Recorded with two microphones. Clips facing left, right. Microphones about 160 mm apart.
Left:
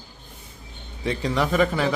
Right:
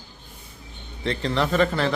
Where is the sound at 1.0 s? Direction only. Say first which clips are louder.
Even; 10° left (ahead or behind).